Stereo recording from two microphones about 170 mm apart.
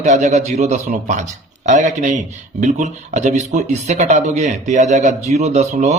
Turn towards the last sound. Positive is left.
turn(degrees=-45)  # may be behind; listen again after turning